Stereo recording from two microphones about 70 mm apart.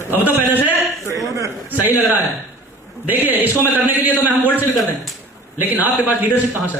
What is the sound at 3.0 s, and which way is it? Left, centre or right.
A man's voice, right.